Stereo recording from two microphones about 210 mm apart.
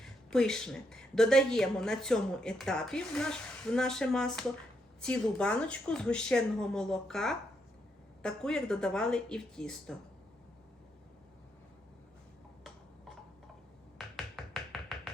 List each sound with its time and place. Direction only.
0.0 s speech: centre (ahead or behind)
14.0 s music: centre (ahead or behind)